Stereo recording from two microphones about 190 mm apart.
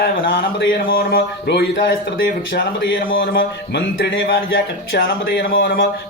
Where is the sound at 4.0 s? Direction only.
65° left (ahead or behind).